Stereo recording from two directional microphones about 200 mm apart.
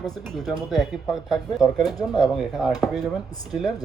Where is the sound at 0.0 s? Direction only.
Centre (ahead or behind).